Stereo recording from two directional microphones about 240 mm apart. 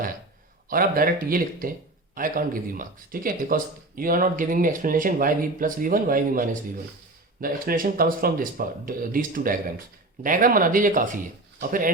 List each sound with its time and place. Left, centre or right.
0.7 s speech: right